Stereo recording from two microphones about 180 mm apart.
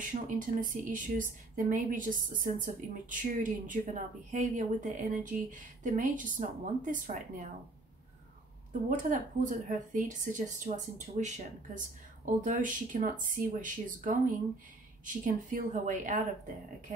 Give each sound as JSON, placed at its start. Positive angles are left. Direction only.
{"t": 0.0, "sound": "a woman's voice", "side_deg": -45}
{"t": 8.8, "sound": "a woman's voice", "side_deg": -45}